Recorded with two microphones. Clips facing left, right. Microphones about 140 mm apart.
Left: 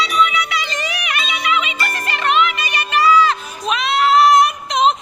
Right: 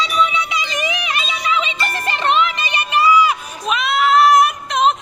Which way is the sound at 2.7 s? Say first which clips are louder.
Even; 15° right (ahead or behind).